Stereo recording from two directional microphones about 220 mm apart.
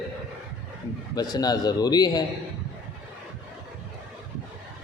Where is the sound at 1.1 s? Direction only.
15° left (ahead or behind).